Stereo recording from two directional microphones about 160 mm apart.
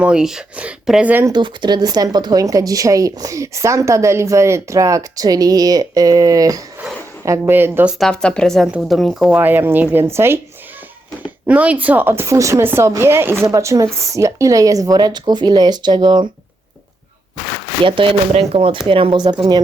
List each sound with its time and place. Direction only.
0.0 s speech: 5° right (ahead or behind)
1.3 s speech: 25° right (ahead or behind); by 7.9 s 10° right (ahead or behind)
7.9 s a woman's voice: 5° left (ahead or behind); by 10.4 s 15° right (ahead or behind)
11.4 s speech: 10° right (ahead or behind); by 16.3 s 30° right (ahead or behind)
17.8 s speech: 30° right (ahead or behind)